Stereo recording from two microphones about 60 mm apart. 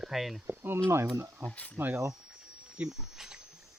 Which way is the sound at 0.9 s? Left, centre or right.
Right.